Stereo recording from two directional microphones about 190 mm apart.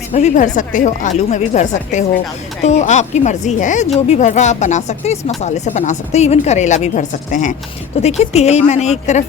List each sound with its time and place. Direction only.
0.1 s a woman's voice: 35° left (ahead or behind)